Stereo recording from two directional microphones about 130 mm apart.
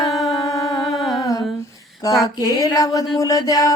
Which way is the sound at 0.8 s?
Centre (ahead or behind).